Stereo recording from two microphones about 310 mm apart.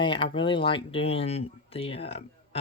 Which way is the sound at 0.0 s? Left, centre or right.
Centre.